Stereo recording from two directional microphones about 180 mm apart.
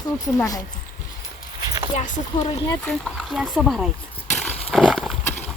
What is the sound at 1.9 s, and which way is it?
Speech, 45° left (ahead or behind).